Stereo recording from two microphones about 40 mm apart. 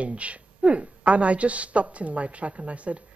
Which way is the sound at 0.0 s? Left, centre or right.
Right.